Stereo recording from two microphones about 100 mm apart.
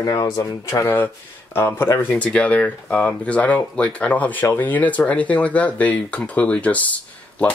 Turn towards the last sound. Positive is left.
turn(degrees=15)  # may be behind; listen again after turning